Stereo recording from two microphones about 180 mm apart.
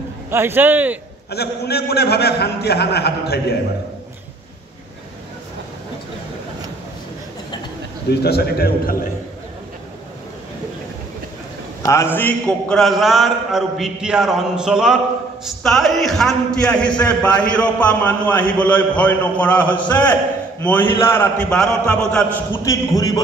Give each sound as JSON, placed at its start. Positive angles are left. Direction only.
{"t": 0.3, "sound": "a man's voice", "side_deg": -15}
{"t": 1.3, "sound": "a man's voice", "side_deg": 65}
{"t": 8.1, "sound": "a man's voice", "side_deg": 60}
{"t": 11.8, "sound": "a man's voice", "side_deg": 15}